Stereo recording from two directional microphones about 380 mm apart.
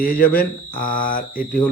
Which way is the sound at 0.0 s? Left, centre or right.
Left.